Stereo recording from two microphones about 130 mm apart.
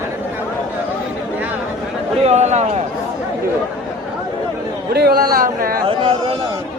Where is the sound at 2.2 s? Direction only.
60° right (ahead or behind).